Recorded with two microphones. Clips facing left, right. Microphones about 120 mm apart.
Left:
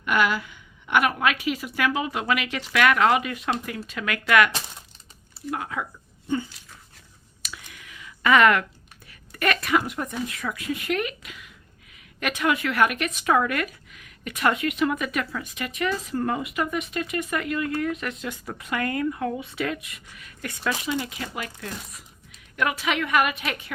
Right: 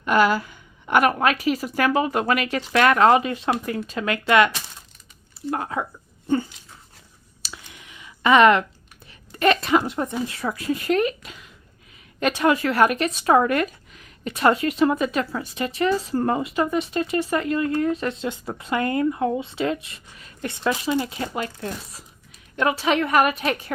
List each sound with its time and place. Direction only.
0.0 s speech: 35° right (ahead or behind)
6.2 s dog: 45° right (ahead or behind)
7.4 s a sound: 25° right (ahead or behind)
9.0 s a woman's voice: 25° right (ahead or behind)